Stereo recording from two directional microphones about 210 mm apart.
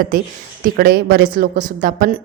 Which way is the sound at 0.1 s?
40° right (ahead or behind).